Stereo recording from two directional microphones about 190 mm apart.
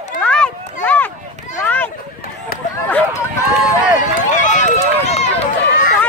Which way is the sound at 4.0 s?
40° left (ahead or behind).